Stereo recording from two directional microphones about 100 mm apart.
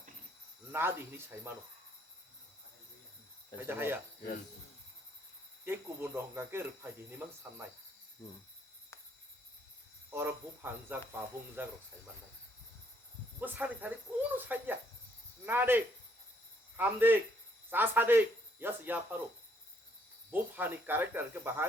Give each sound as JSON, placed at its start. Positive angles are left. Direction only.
{"t": 0.7, "sound": "cricket", "side_deg": -25}
{"t": 3.7, "sound": "cricket", "side_deg": -20}
{"t": 5.6, "sound": "cricket", "side_deg": -25}
{"t": 10.1, "sound": "cricket", "side_deg": -25}
{"t": 13.4, "sound": "cricket", "side_deg": -15}
{"t": 16.7, "sound": "a man's voice", "side_deg": -20}
{"t": 20.3, "sound": "cricket", "side_deg": -20}